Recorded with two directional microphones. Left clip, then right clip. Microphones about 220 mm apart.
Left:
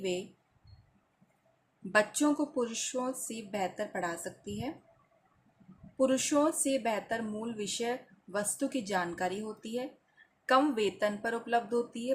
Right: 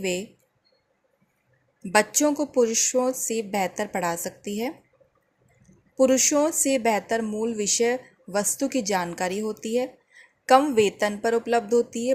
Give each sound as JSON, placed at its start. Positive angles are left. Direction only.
{"t": 0.0, "sound": "speech", "side_deg": -25}
{"t": 1.9, "sound": "speech", "side_deg": -25}
{"t": 6.0, "sound": "speech", "side_deg": -20}